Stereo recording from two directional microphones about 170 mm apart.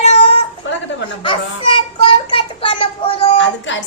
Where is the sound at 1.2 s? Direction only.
30° left (ahead or behind).